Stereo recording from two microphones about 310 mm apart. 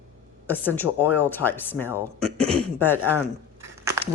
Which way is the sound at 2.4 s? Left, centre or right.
Centre.